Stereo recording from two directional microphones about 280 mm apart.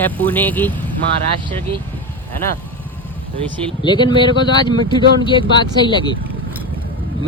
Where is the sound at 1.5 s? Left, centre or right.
Centre.